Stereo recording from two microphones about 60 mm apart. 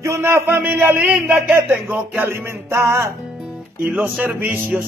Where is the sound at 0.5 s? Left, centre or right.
Right.